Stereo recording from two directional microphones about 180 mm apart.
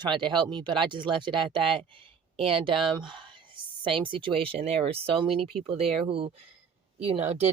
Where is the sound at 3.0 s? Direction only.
25° right (ahead or behind).